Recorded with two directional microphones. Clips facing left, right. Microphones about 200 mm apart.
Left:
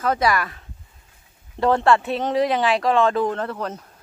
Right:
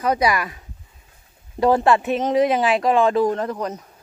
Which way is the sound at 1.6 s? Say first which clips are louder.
Right 1 dB; 15° right (ahead or behind).